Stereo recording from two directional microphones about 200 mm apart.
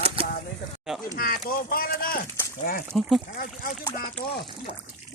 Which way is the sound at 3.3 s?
50° left (ahead or behind).